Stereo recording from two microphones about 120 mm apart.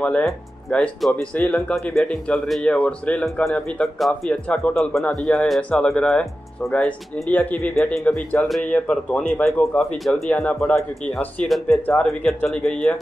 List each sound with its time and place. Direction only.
0.0 s speech: 5° left (ahead or behind)